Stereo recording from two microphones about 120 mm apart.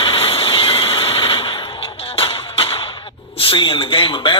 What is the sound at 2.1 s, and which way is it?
Music, 55° left (ahead or behind).